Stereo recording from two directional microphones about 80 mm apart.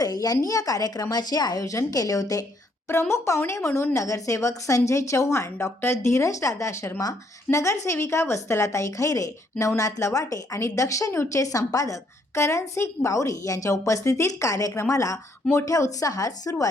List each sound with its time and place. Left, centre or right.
0.0 s a woman's voice: left
2.9 s a woman's voice: left